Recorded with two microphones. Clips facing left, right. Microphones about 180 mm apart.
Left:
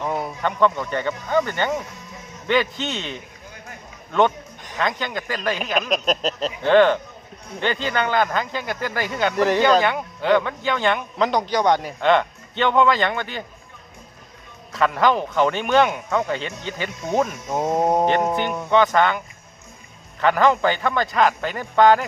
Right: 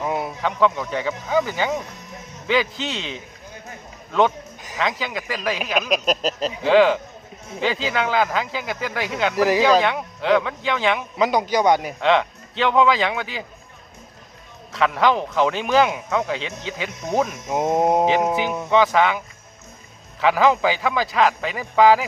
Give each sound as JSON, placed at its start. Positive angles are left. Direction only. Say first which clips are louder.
{"t": 0.0, "sound": "a sound", "louder": "even", "side_deg": 0}
{"t": 1.3, "sound": "speech", "louder": "even", "side_deg": 0}
{"t": 14.7, "sound": "speech", "louder": "even", "side_deg": 0}
{"t": 17.5, "sound": "mantra", "louder": "right 2 dB", "side_deg": -20}
{"t": 17.9, "sound": "speech", "louder": "right 1 dB", "side_deg": 0}